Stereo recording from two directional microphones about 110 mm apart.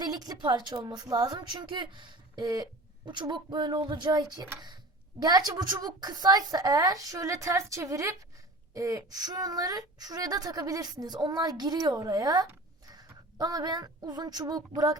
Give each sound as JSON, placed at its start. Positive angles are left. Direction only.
{"t": 0.0, "sound": "a woman's voice", "side_deg": -35}